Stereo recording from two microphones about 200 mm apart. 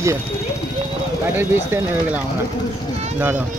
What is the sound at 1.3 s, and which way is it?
Speech, 10° right (ahead or behind).